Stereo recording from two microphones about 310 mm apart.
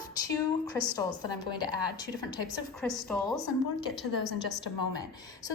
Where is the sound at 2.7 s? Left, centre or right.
Centre.